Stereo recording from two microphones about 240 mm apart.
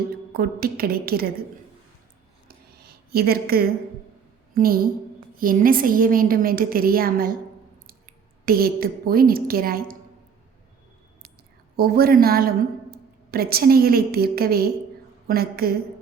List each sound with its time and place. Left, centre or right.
0.3 s a woman's voice: right
3.1 s a woman's voice: right
11.8 s a woman's voice: right